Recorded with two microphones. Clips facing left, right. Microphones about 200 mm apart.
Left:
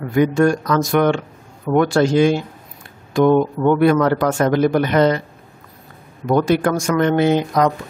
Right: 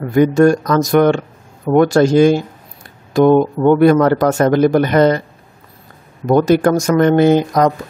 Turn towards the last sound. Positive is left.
turn(degrees=-45)  # may be behind; listen again after turning